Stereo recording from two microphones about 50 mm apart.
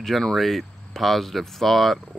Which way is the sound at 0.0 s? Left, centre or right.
Centre.